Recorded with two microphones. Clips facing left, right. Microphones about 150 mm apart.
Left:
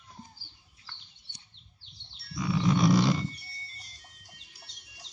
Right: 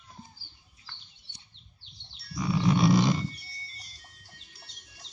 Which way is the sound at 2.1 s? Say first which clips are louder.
Right 1 dB; 25° left (ahead or behind).